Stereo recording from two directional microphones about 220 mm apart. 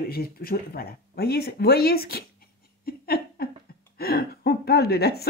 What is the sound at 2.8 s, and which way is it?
Laughter, 45° left (ahead or behind).